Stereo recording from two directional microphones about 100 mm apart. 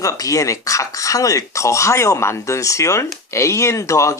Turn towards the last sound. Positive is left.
turn(degrees=30)  # may be behind; listen again after turning